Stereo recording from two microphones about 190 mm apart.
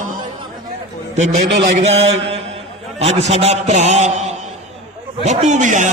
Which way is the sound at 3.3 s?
35° right (ahead or behind).